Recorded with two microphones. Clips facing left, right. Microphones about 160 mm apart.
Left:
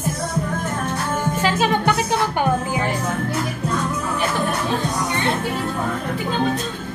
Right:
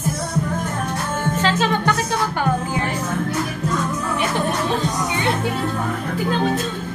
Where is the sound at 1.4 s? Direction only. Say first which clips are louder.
Left 1 dB; 15° left (ahead or behind).